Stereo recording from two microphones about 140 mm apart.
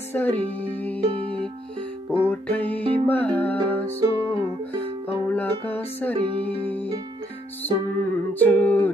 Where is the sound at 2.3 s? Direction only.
10° left (ahead or behind).